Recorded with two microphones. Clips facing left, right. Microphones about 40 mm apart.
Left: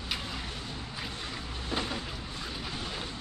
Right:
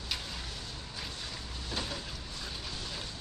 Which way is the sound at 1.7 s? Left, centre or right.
Left.